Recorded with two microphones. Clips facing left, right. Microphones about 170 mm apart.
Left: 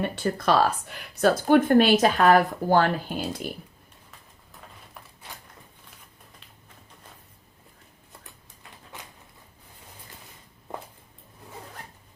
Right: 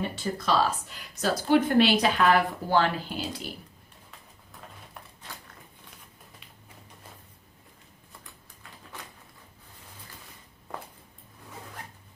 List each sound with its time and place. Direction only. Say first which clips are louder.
0.0 s speech: left 5 dB; 60° left (ahead or behind)